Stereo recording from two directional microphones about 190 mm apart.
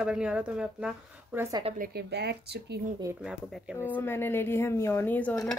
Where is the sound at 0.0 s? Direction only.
5° right (ahead or behind).